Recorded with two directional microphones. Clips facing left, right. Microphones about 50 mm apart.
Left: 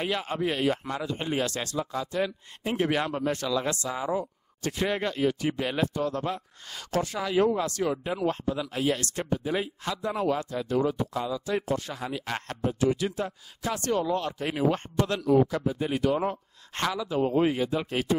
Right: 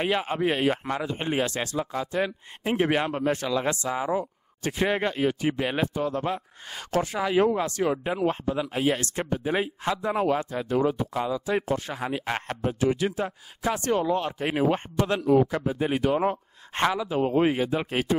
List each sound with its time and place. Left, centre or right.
0.0 s speech: right